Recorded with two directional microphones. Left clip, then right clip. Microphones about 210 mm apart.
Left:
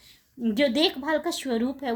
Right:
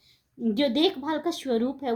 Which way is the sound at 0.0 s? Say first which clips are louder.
Even; 15° left (ahead or behind).